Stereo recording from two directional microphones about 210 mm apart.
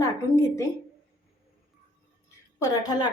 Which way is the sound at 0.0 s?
15° left (ahead or behind).